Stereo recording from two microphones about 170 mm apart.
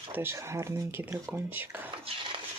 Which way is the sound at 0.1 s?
15° right (ahead or behind).